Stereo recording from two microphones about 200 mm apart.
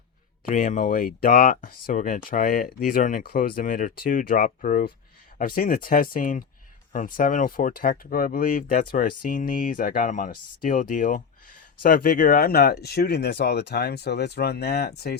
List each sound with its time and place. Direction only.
0.4 s speech: 40° left (ahead or behind)